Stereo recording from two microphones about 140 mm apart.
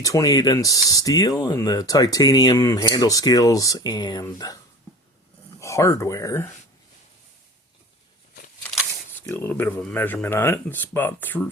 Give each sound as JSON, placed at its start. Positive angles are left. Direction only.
{"t": 0.0, "sound": "speech", "side_deg": 25}
{"t": 5.5, "sound": "speech", "side_deg": 20}
{"t": 9.2, "sound": "speech", "side_deg": 15}